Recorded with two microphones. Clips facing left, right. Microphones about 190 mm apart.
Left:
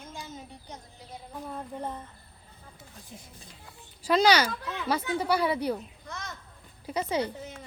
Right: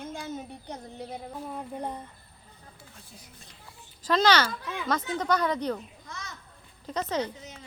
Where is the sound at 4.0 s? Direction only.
10° left (ahead or behind).